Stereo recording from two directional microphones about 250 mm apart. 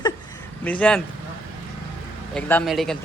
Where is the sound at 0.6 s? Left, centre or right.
Centre.